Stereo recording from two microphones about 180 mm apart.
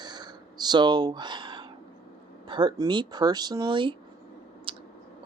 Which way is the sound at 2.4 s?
25° right (ahead or behind).